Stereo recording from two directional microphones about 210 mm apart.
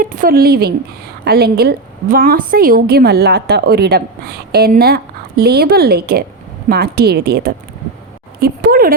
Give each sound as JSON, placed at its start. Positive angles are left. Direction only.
{"t": 0.0, "sound": "a woman's voice", "side_deg": -40}